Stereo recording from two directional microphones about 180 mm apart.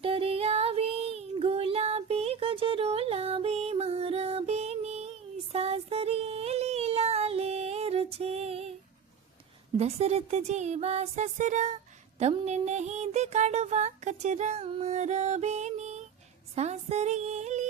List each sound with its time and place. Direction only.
0.0 s child singing: 30° right (ahead or behind)
9.7 s a sound: 35° right (ahead or behind)
16.6 s music: 40° right (ahead or behind)